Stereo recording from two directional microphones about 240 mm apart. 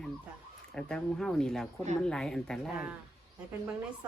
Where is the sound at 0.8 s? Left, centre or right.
Centre.